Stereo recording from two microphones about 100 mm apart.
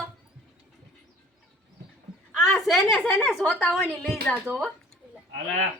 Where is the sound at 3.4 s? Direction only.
15° left (ahead or behind).